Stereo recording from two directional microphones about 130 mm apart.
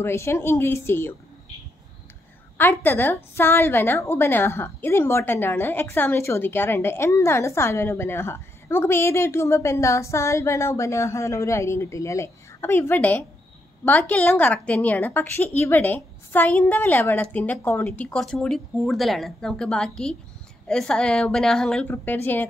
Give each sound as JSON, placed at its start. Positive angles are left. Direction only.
{"t": 0.0, "sound": "a woman's voice", "side_deg": 20}
{"t": 2.5, "sound": "a woman's voice", "side_deg": 15}
{"t": 21.8, "sound": "a woman's voice", "side_deg": 15}